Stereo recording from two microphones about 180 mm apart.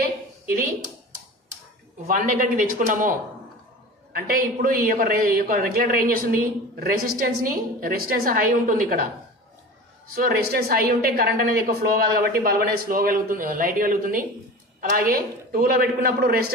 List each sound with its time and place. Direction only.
0.0 s a sound: 55° right (ahead or behind)
2.0 s a man's voice: 50° right (ahead or behind)
10.1 s a woman's voice: 55° right (ahead or behind)